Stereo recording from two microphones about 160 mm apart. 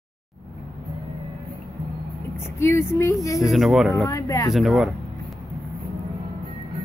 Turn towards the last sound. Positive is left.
turn(degrees=0)  # may be behind; listen again after turning